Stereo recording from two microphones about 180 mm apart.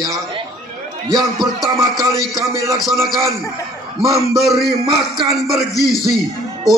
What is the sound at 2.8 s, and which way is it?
Speech, centre (ahead or behind).